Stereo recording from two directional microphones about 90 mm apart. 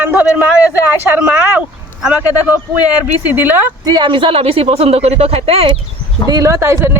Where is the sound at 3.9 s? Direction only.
60° right (ahead or behind); by 5.7 s 90° right.